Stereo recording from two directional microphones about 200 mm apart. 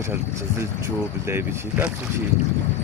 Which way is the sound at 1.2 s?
10° right (ahead or behind).